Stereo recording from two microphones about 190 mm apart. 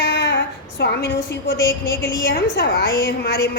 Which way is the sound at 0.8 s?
65° left (ahead or behind).